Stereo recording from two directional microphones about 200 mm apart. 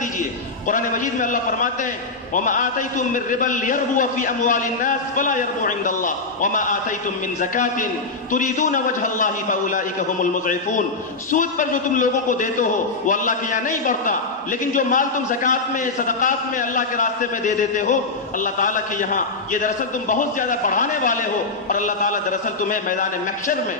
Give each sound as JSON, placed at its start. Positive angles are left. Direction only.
{"t": 0.2, "sound": "a man's voice", "side_deg": 40}
{"t": 11.2, "sound": "a man's voice", "side_deg": 40}